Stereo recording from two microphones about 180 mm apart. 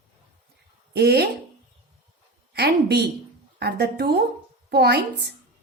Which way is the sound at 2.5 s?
65° right (ahead or behind).